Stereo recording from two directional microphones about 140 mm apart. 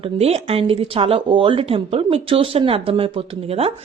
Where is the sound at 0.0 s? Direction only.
45° right (ahead or behind).